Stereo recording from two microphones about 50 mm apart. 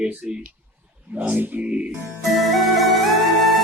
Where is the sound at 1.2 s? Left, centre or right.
Right.